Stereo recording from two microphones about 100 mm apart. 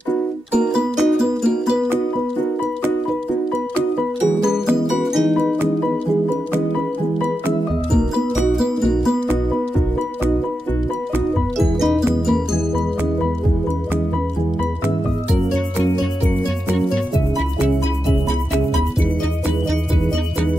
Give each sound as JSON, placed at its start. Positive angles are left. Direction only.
{"t": 0.5, "sound": "music", "side_deg": -10}
{"t": 4.5, "sound": "music", "side_deg": -5}
{"t": 11.5, "sound": "music", "side_deg": 0}